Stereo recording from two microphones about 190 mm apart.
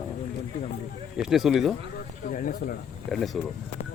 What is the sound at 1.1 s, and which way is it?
Speech, centre (ahead or behind).